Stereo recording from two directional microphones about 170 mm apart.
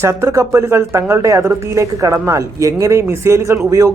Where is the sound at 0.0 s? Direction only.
15° right (ahead or behind).